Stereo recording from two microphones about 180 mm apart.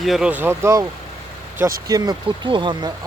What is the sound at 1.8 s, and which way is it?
Speech, 20° right (ahead or behind).